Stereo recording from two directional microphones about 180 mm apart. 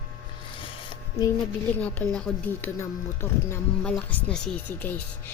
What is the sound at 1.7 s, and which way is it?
Speech, 10° left (ahead or behind).